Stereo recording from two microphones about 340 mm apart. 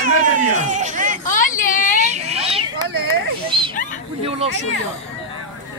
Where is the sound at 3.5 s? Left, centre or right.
Centre.